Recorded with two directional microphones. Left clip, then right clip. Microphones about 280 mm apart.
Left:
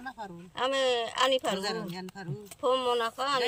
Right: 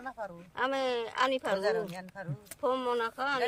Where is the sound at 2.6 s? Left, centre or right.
Centre.